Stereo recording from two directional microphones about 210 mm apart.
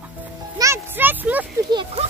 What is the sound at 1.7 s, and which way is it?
Speech, 25° right (ahead or behind).